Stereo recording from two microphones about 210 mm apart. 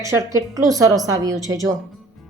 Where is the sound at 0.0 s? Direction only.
15° right (ahead or behind).